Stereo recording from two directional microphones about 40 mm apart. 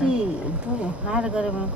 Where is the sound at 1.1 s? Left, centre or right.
Right.